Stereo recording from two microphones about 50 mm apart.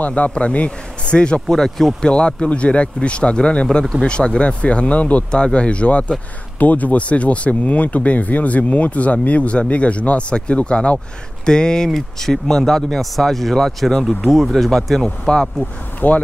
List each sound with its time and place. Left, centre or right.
0.0 s speech: left
1.5 s speech: centre
2.0 s speech: centre
15.0 s speech: centre
16.0 s speech: left